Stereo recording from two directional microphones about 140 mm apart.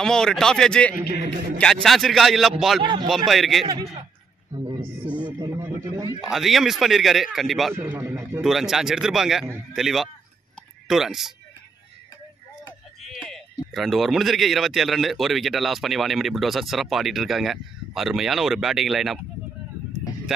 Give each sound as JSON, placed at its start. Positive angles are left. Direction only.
{"t": 0.0, "sound": "speech", "side_deg": 5}
{"t": 2.8, "sound": "speech", "side_deg": -35}
{"t": 3.3, "sound": "speech", "side_deg": 0}
{"t": 5.2, "sound": "a sound", "side_deg": -30}
{"t": 6.2, "sound": "speech", "side_deg": 0}
{"t": 7.7, "sound": "speech", "side_deg": -15}
{"t": 8.4, "sound": "speech", "side_deg": 0}
{"t": 13.0, "sound": "speech", "side_deg": 0}
{"t": 20.3, "sound": "speech", "side_deg": -5}